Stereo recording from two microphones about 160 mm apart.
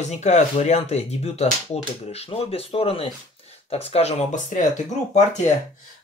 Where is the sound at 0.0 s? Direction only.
45° left (ahead or behind).